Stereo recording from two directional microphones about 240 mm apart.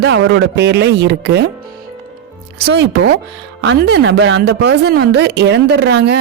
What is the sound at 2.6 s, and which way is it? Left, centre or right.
Speech, right.